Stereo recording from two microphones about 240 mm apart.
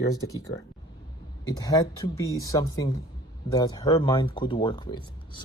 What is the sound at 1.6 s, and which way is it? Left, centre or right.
Speech, centre.